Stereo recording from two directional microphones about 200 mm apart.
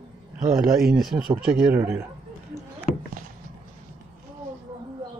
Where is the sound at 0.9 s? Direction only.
Centre (ahead or behind).